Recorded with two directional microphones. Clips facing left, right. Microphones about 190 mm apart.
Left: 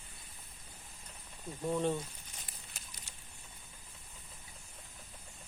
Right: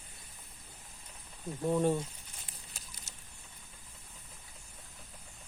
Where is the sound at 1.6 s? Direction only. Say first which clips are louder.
Right 4 dB; 15° right (ahead or behind).